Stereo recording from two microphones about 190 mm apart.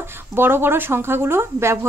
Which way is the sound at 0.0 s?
10° right (ahead or behind).